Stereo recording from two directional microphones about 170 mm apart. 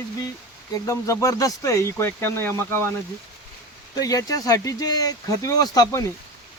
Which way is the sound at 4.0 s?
20° left (ahead or behind).